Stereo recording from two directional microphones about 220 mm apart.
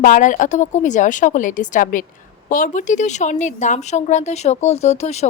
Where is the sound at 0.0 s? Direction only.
35° left (ahead or behind).